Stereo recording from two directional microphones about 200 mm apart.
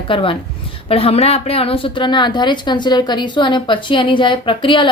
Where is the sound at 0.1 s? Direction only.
25° left (ahead or behind).